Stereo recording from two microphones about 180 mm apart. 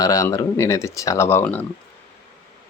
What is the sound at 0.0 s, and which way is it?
Speech, 20° left (ahead or behind).